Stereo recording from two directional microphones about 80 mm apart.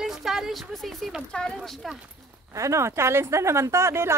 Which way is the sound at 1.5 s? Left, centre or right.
Centre.